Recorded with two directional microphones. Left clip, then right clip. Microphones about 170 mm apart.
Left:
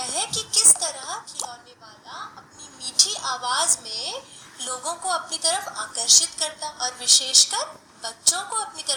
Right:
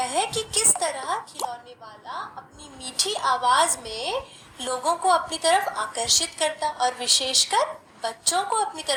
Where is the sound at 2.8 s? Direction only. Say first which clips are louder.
Left 1 dB; 40° right (ahead or behind).